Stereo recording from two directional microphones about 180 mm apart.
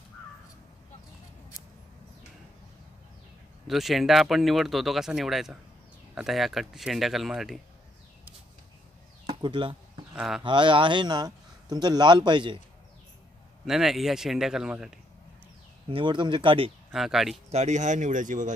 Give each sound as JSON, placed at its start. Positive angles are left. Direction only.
{"t": 3.6, "sound": "speech", "side_deg": 0}
{"t": 9.2, "sound": "a sound", "side_deg": -25}
{"t": 10.1, "sound": "speech", "side_deg": -5}
{"t": 10.4, "sound": "speech", "side_deg": -25}
{"t": 13.7, "sound": "speech", "side_deg": 0}
{"t": 15.9, "sound": "speech", "side_deg": -25}
{"t": 16.9, "sound": "speech", "side_deg": 0}
{"t": 17.5, "sound": "speech", "side_deg": -40}